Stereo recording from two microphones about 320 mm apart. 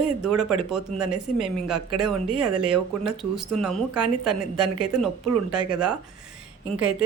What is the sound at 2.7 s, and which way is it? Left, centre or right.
Speech, centre.